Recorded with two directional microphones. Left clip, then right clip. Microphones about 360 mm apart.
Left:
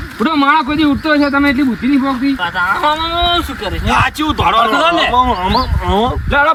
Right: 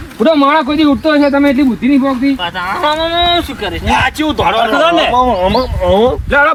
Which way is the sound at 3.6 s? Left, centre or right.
Centre.